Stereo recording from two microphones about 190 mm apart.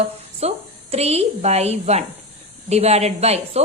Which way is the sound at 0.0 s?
35° right (ahead or behind).